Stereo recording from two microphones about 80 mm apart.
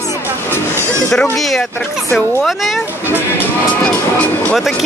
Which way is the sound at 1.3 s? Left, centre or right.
Centre.